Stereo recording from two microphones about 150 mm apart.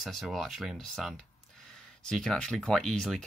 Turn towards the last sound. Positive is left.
turn(degrees=5)  # may be behind; listen again after turning